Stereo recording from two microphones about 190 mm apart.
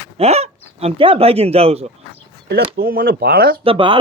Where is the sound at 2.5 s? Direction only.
55° right (ahead or behind).